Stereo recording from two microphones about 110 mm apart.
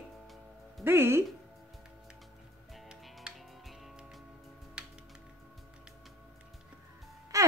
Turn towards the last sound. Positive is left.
turn(degrees=-30)  # may be behind; listen again after turning